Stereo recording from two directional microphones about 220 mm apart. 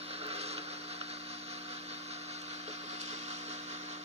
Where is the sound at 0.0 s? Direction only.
25° right (ahead or behind).